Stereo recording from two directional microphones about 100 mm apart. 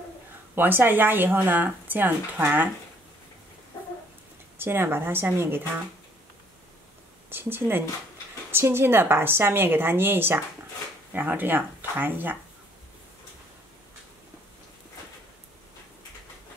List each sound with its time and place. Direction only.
0.6 s speech: 20° right (ahead or behind)
4.6 s speech: 20° right (ahead or behind)
7.2 s speech: 20° right (ahead or behind)